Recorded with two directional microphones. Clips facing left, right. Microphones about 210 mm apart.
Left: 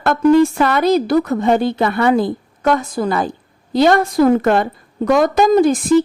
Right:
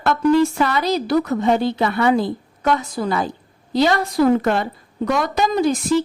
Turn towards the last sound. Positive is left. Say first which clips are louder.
# left 6 dB
turn(degrees=50)  # may be behind; listen again after turning